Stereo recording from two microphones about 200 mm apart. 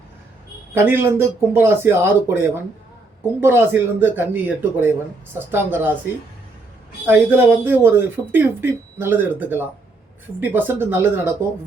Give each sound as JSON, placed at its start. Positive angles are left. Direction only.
{"t": 0.7, "sound": "speech", "side_deg": -10}
{"t": 3.4, "sound": "speech", "side_deg": -10}
{"t": 7.1, "sound": "speech", "side_deg": -10}